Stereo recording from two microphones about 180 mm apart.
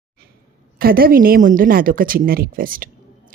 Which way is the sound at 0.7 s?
55° right (ahead or behind).